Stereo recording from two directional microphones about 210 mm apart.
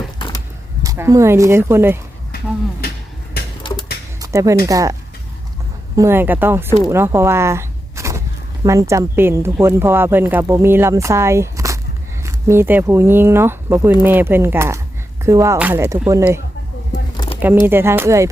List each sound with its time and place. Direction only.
0.2 s vehicle: 25° left (ahead or behind)
0.8 s speech: 15° right (ahead or behind)
3.6 s music: 25° left (ahead or behind)
4.2 s a sound: 15° right (ahead or behind)
4.6 s speech: 15° right (ahead or behind)
6.0 s speech: 10° right (ahead or behind)
17.7 s speech: 10° right (ahead or behind)